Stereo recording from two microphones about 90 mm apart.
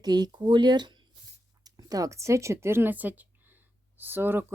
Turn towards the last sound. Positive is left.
turn(degrees=-25)  # may be behind; listen again after turning